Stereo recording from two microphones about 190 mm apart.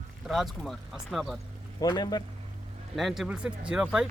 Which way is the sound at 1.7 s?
20° left (ahead or behind).